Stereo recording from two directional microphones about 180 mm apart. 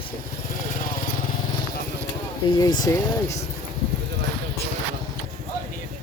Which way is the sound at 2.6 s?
20° left (ahead or behind).